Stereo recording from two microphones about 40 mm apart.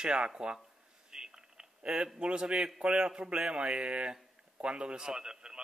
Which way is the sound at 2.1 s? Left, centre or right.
Right.